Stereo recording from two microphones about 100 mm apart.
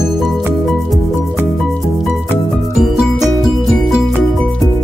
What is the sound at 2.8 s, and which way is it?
Music, centre (ahead or behind).